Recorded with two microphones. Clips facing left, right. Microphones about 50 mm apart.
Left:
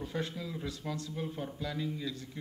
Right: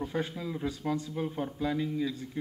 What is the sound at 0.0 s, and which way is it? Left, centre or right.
Speech, centre.